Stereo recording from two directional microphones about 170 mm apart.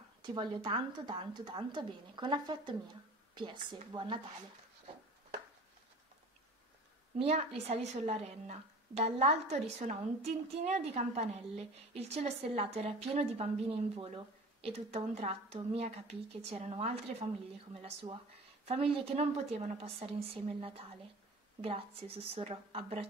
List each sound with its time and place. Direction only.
0.2 s a woman's voice: 25° right (ahead or behind)
7.2 s a woman's voice: 35° right (ahead or behind)
18.7 s a woman's voice: 35° right (ahead or behind)
21.5 s a woman's voice: 35° right (ahead or behind)